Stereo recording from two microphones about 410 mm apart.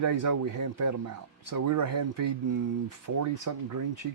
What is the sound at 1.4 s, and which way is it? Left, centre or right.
Speech, right.